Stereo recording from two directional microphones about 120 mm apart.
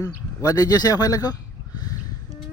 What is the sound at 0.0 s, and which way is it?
Speech, 30° left (ahead or behind).